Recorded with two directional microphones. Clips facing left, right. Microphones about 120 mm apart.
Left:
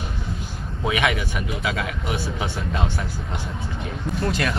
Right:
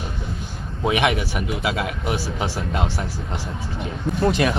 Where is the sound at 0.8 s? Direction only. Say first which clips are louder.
Right 3 dB; 30° right (ahead or behind).